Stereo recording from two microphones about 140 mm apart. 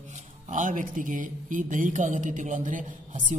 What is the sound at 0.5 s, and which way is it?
Speech, 65° right (ahead or behind).